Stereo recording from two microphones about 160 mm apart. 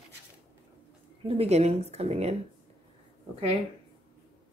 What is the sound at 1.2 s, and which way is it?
Speech, 40° right (ahead or behind).